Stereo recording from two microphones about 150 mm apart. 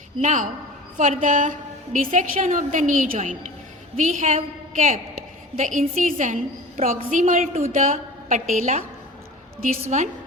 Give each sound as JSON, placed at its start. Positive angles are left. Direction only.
{"t": 0.2, "sound": "a woman's voice", "side_deg": -55}
{"t": 9.9, "sound": "a woman's voice", "side_deg": -55}